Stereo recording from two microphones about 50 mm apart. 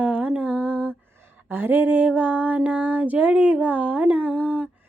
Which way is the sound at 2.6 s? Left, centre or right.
Right.